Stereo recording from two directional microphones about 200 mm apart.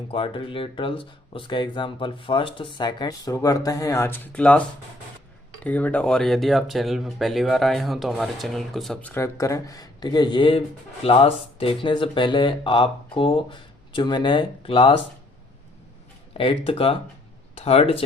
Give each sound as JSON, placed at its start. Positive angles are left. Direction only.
{"t": 0.1, "sound": "speech", "side_deg": 25}
{"t": 5.6, "sound": "speech", "side_deg": 10}
{"t": 16.3, "sound": "speech", "side_deg": 30}